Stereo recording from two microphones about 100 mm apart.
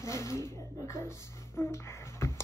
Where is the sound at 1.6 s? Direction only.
25° left (ahead or behind).